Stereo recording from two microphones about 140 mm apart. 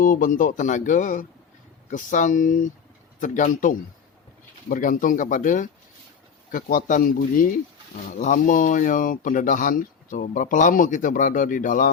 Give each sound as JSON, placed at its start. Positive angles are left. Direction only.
{"t": 0.0, "sound": "speech", "side_deg": 75}
{"t": 6.5, "sound": "speech", "side_deg": 85}
{"t": 8.1, "sound": "speech", "side_deg": 65}